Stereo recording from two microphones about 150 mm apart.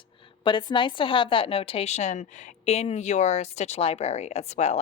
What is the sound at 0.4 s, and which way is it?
A woman's voice, 30° left (ahead or behind).